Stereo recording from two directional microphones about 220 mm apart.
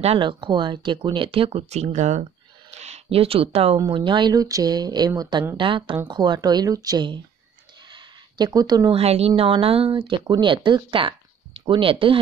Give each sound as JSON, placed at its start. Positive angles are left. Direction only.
{"t": 0.0, "sound": "a woman's voice", "side_deg": -25}